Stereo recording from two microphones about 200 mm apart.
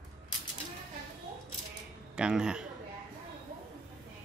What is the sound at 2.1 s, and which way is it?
Speech, 5° right (ahead or behind).